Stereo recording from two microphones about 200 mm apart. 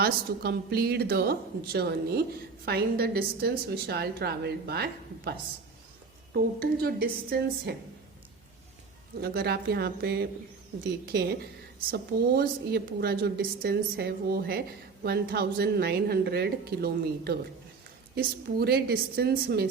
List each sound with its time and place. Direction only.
0.0 s a woman's voice: 50° right (ahead or behind)
9.2 s a woman's voice: 50° right (ahead or behind)